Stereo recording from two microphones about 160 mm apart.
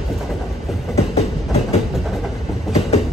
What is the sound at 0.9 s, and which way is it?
Train, 40° left (ahead or behind).